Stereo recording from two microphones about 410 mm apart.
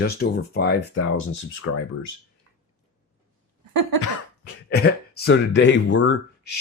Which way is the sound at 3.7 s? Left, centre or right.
Right.